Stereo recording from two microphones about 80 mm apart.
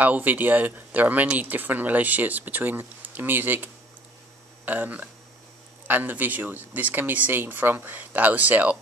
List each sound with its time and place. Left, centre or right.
0.0 s speech: right